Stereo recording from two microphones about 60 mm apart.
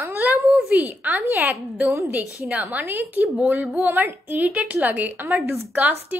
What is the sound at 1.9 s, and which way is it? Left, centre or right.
Speech, right.